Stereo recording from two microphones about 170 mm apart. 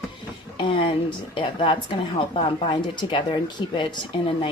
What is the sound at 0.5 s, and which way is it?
A woman's voice, 25° left (ahead or behind).